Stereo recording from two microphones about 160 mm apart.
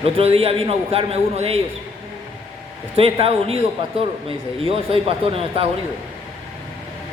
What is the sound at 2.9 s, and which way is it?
Speech, 35° right (ahead or behind).